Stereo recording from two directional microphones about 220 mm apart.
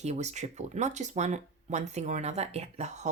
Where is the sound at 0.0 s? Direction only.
30° right (ahead or behind).